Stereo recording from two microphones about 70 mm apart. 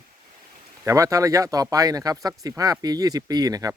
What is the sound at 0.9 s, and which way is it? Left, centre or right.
Speech, right.